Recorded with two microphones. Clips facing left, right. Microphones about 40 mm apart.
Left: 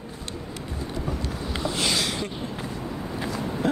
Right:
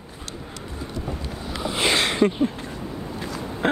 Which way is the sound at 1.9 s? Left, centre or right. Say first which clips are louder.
Right 8 dB; right.